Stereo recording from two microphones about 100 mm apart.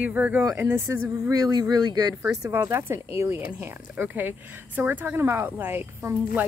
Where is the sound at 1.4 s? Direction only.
40° right (ahead or behind).